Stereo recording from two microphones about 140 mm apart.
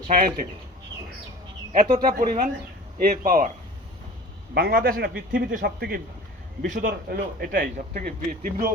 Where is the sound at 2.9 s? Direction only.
90° right; by 3.5 s 70° right (ahead or behind).